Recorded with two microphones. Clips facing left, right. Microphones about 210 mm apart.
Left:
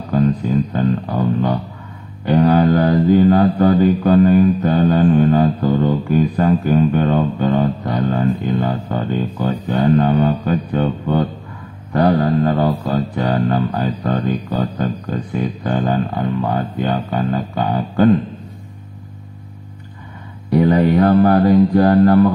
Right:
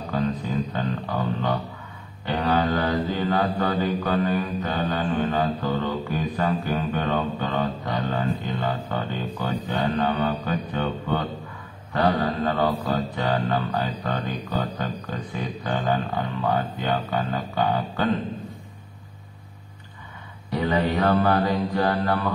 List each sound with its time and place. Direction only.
0.7 s guitar: 40° left (ahead or behind)
2.2 s mantra: 40° left (ahead or behind)
20.5 s mantra: 45° left (ahead or behind)